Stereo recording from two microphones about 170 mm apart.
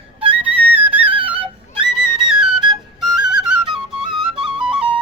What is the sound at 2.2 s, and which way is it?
Flute, 5° right (ahead or behind).